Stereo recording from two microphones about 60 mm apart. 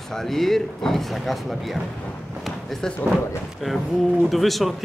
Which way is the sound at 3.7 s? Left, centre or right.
Centre.